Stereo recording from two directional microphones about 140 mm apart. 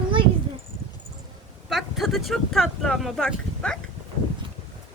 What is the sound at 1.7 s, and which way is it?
Speech, centre (ahead or behind).